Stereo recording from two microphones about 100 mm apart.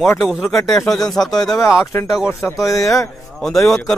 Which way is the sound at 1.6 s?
30° left (ahead or behind).